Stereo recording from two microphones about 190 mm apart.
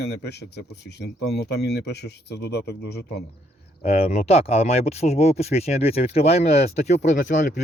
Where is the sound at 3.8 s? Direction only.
35° left (ahead or behind).